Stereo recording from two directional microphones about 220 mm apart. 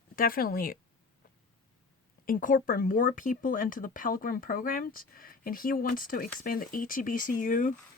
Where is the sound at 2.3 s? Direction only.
40° left (ahead or behind).